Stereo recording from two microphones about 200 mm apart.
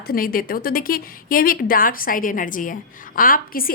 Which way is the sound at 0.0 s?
45° left (ahead or behind).